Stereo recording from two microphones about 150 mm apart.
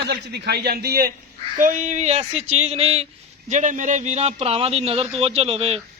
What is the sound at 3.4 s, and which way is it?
A man's voice, 55° right (ahead or behind).